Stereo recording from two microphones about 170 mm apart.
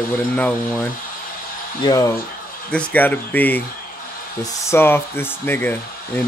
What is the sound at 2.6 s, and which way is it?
Speech, 10° left (ahead or behind).